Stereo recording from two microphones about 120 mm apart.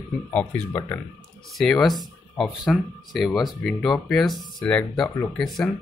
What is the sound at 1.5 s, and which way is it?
Speech, 5° left (ahead or behind).